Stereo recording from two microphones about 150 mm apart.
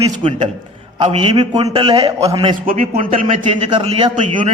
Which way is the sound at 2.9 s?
50° right (ahead or behind).